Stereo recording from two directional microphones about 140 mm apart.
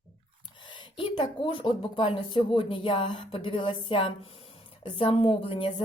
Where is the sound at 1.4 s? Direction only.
35° left (ahead or behind).